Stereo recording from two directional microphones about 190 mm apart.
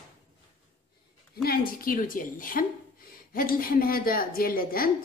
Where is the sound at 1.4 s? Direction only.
50° left (ahead or behind).